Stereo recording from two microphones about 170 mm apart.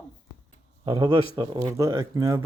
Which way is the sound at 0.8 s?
25° right (ahead or behind).